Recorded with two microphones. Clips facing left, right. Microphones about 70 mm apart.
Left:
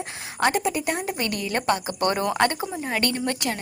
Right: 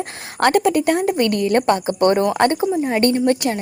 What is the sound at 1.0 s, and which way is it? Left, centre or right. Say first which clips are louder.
A woman's voice: right 10 dB; right.